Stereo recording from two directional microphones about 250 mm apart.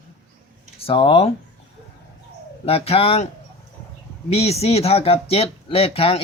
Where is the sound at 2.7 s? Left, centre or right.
Left.